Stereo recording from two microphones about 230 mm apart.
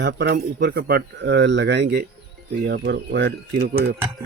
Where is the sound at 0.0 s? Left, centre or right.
Right.